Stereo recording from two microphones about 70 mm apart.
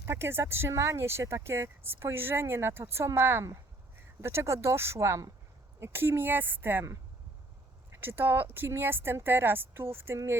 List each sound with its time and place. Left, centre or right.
0.0 s speech: right
5.8 s speech: right
7.9 s speech: right